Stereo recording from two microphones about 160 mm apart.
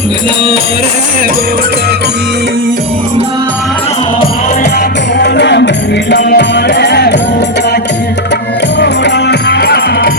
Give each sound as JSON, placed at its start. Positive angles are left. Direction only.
{"t": 5.2, "sound": "music", "side_deg": 90}
{"t": 8.8, "sound": "music", "side_deg": 90}